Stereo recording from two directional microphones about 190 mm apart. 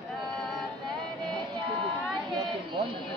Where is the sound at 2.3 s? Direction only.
25° right (ahead or behind).